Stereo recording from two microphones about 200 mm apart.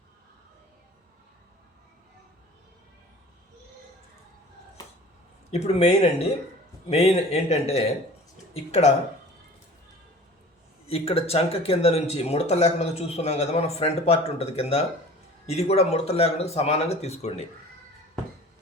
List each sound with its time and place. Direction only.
5.5 s speech: 35° left (ahead or behind)
10.8 s speech: 30° left (ahead or behind)